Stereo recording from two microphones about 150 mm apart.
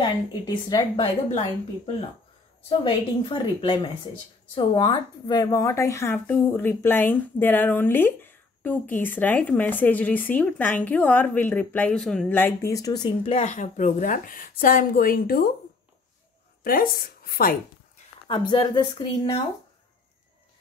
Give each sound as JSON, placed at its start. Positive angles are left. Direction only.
{"t": 0.3, "sound": "speech", "side_deg": 25}
{"t": 2.8, "sound": "a woman's voice", "side_deg": 35}
{"t": 12.3, "sound": "speech", "side_deg": 15}
{"t": 13.2, "sound": "a woman's voice", "side_deg": 50}
{"t": 16.6, "sound": "speech", "side_deg": 75}
{"t": 18.3, "sound": "a woman's voice", "side_deg": 30}